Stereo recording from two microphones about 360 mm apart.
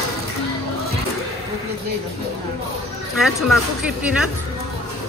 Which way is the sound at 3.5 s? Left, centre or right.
Centre.